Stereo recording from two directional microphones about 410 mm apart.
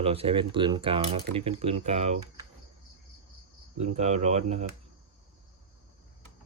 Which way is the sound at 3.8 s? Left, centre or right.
Centre.